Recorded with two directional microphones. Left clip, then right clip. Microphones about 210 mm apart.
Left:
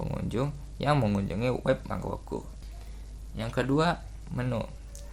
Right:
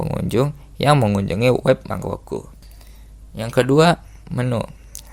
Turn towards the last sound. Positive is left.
turn(degrees=-40)  # may be behind; listen again after turning